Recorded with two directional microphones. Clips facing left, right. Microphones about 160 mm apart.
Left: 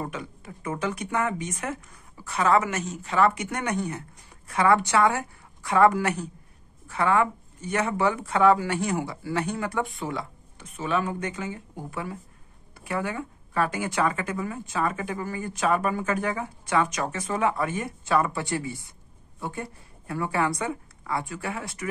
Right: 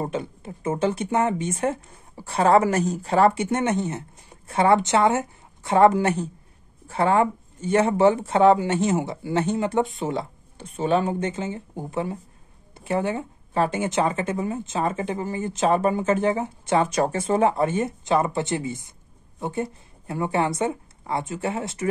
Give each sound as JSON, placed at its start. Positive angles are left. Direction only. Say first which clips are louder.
{"t": 0.0, "sound": "a woman's voice", "louder": "right 6 dB", "side_deg": -30}